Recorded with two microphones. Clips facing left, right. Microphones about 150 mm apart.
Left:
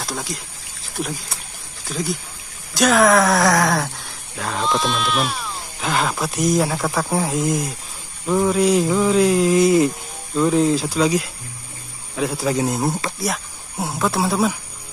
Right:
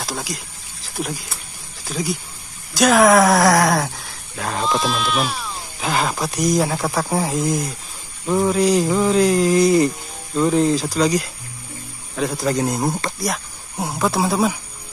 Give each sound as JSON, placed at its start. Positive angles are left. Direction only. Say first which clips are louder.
{"t": 0.0, "sound": "speech", "louder": "even", "side_deg": -5}